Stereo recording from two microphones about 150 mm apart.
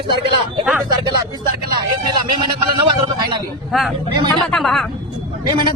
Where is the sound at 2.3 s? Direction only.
30° right (ahead or behind).